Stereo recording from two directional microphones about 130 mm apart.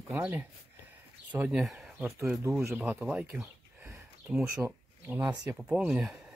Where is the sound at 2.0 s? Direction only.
15° right (ahead or behind).